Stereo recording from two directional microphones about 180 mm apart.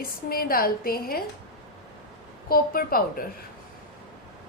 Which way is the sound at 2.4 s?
55° left (ahead or behind).